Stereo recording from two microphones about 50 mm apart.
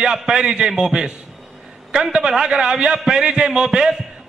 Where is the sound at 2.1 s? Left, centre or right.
Centre.